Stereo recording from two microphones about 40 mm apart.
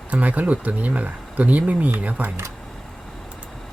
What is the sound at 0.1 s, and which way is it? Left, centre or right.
Speech, right.